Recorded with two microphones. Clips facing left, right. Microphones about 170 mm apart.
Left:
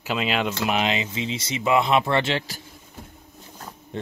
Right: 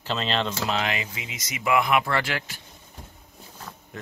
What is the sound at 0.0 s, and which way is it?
Speech, 10° left (ahead or behind).